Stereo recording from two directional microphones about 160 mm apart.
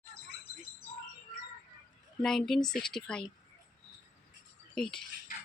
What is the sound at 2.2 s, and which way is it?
Speech, 5° left (ahead or behind).